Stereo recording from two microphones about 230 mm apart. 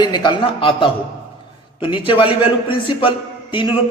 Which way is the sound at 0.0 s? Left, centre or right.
Centre.